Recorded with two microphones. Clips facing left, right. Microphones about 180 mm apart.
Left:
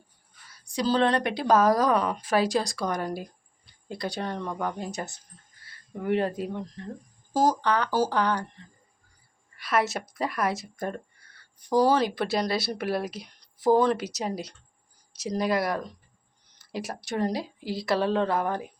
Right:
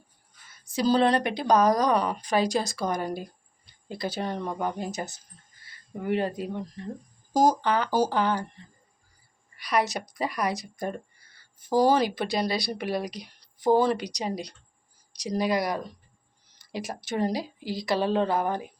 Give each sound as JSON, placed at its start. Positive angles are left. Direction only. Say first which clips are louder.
{"t": 0.6, "sound": "a sound", "louder": "right 2 dB", "side_deg": -5}
{"t": 0.9, "sound": "a woman's voice", "louder": "right 2 dB", "side_deg": -10}
{"t": 7.9, "sound": "speech", "louder": "right 1 dB", "side_deg": -15}
{"t": 8.1, "sound": "a woman's voice", "louder": "even", "side_deg": -5}
{"t": 9.6, "sound": "a woman's voice", "louder": "even", "side_deg": 0}